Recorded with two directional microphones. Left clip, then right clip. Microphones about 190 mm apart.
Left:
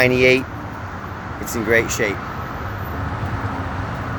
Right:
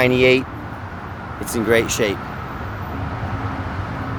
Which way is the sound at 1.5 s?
25° right (ahead or behind).